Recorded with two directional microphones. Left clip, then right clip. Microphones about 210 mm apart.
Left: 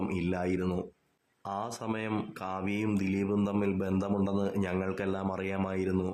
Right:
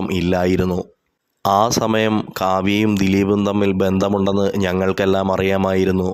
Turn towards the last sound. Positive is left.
turn(degrees=-35)  # may be behind; listen again after turning